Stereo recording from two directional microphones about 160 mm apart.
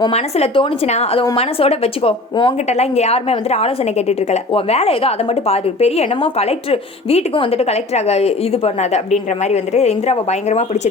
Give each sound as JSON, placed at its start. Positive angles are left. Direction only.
{"t": 0.1, "sound": "speech", "side_deg": 40}